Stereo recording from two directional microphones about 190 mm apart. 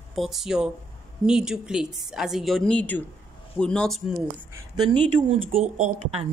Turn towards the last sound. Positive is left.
turn(degrees=-30)  # may be behind; listen again after turning